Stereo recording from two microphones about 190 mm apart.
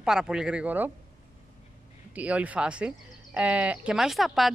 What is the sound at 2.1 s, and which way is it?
Speech, 5° right (ahead or behind).